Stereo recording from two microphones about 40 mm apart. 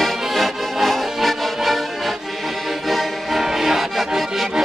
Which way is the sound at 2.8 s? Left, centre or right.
Centre.